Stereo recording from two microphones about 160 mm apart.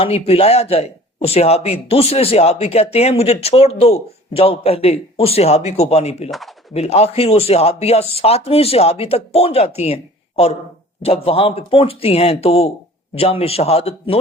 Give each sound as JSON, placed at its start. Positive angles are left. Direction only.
{"t": 0.0, "sound": "a man's voice", "side_deg": 35}